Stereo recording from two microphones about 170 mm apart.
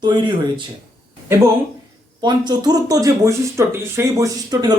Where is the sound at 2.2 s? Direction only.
25° right (ahead or behind).